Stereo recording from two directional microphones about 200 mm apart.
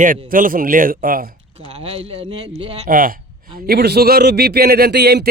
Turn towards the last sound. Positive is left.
turn(degrees=-55)  # may be behind; listen again after turning